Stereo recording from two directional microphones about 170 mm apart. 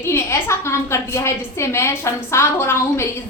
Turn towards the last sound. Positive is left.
turn(degrees=15)  # may be behind; listen again after turning